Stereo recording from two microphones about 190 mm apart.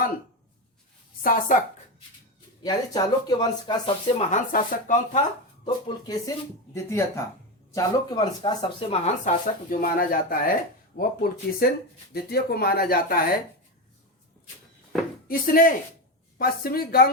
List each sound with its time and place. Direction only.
1.2 s speech: 45° left (ahead or behind)
2.6 s speech: 20° left (ahead or behind)
4.1 s speech: 40° left (ahead or behind)
5.6 s speech: 20° left (ahead or behind)
7.7 s speech: 20° left (ahead or behind)
9.2 s speech: 45° left (ahead or behind)
15.3 s speech: 50° left (ahead or behind)